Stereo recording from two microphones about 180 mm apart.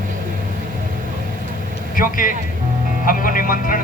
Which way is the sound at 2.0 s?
50° left (ahead or behind).